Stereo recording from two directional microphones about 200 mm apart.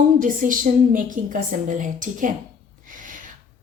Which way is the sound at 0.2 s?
40° right (ahead or behind).